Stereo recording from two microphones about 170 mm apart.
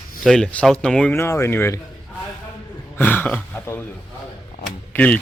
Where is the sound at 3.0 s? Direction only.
10° left (ahead or behind).